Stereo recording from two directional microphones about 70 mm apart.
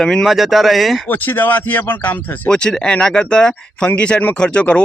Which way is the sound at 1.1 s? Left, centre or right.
Left.